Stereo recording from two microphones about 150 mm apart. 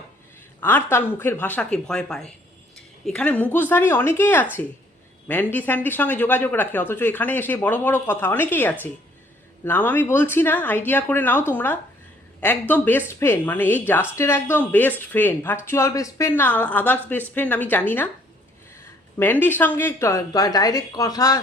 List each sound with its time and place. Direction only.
0.6 s speech: 15° left (ahead or behind)
19.2 s a woman's voice: 10° left (ahead or behind)